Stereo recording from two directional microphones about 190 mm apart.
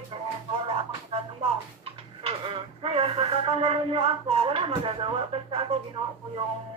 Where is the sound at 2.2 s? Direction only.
30° right (ahead or behind).